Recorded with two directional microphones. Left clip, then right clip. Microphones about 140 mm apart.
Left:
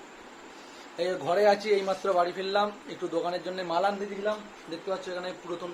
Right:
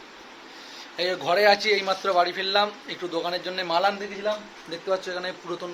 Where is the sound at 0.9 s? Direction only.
Centre (ahead or behind).